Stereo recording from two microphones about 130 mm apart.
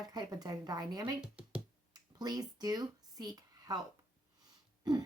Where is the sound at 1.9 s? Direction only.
30° right (ahead or behind).